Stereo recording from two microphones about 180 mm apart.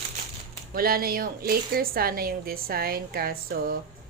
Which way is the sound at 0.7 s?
55° right (ahead or behind).